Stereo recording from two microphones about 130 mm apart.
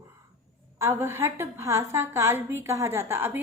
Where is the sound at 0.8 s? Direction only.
20° right (ahead or behind).